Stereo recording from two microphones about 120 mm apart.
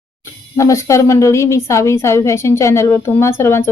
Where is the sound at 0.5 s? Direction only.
25° left (ahead or behind).